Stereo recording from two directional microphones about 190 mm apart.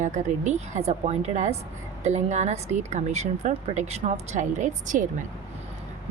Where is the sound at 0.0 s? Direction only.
40° right (ahead or behind).